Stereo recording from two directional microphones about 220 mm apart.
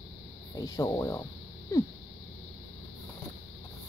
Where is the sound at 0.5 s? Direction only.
15° left (ahead or behind).